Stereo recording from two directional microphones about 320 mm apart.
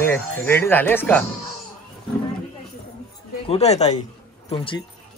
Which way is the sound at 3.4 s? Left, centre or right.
Centre.